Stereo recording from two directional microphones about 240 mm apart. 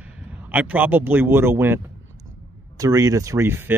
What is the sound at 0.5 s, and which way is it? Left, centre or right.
Speech, centre.